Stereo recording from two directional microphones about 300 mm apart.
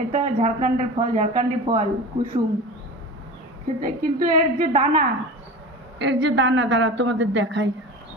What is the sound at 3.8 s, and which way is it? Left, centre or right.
Speech, right.